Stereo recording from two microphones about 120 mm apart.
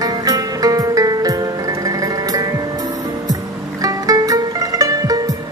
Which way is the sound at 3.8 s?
30° right (ahead or behind).